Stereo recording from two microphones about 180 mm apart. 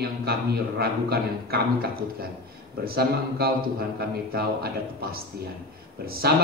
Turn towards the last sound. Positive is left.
turn(degrees=-60)  # may be behind; listen again after turning